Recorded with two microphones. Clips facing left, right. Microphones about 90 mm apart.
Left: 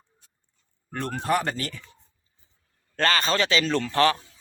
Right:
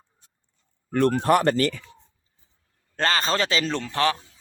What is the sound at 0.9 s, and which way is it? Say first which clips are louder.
Speech: right 6 dB; 65° right (ahead or behind).